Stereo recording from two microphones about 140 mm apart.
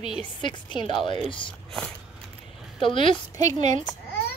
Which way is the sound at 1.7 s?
5° left (ahead or behind).